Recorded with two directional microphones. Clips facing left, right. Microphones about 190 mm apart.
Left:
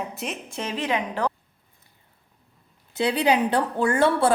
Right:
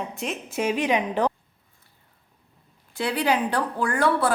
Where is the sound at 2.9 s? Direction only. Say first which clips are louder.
Left 3 dB; 20° left (ahead or behind).